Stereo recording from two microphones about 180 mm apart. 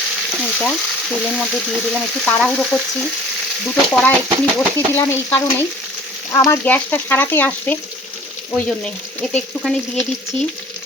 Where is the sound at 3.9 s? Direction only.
5° left (ahead or behind).